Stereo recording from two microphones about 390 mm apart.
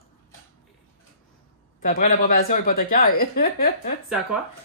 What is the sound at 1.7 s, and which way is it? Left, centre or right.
Speech, left.